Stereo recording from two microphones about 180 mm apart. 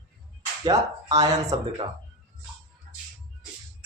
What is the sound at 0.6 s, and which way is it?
Speech, 20° right (ahead or behind).